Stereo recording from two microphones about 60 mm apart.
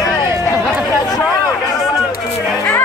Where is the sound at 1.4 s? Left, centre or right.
Left.